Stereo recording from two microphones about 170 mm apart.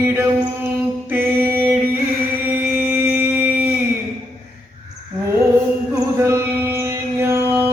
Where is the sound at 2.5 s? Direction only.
10° right (ahead or behind).